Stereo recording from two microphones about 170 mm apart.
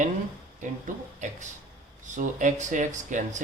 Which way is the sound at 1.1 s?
45° right (ahead or behind).